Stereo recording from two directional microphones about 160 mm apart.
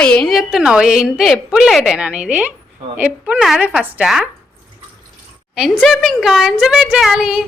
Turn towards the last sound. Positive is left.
turn(degrees=-5)  # may be behind; listen again after turning